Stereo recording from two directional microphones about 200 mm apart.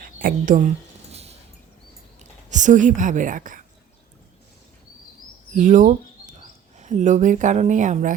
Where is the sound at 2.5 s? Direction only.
40° right (ahead or behind).